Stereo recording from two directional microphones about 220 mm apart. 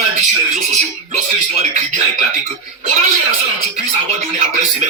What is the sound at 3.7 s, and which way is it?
A man's voice, 30° right (ahead or behind).